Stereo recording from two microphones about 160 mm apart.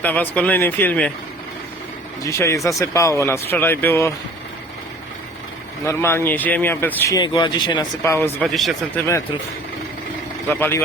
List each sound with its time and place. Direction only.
0.0 s speech: 10° left (ahead or behind)
2.2 s speech: 20° left (ahead or behind)
5.8 s speech: 15° left (ahead or behind)
7.1 s speech: 25° left (ahead or behind)
8.0 s speech: 15° left (ahead or behind)
8.4 s speech: centre (ahead or behind)
9.0 s speech: 20° left (ahead or behind)
10.5 s speech: 10° left (ahead or behind)